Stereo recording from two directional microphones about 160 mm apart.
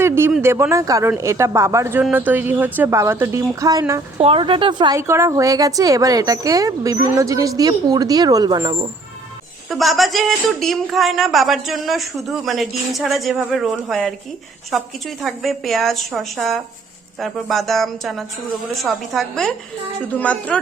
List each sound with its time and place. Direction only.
0.0 s speech: 15° right (ahead or behind)
4.2 s speech: 35° right (ahead or behind)
4.9 s speech: 15° right (ahead or behind)
9.6 s speech: centre (ahead or behind)